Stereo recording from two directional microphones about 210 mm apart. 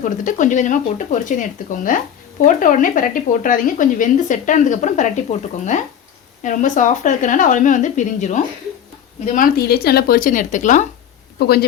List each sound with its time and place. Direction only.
0.0 s speech: 35° left (ahead or behind)
11.3 s speech: 50° left (ahead or behind)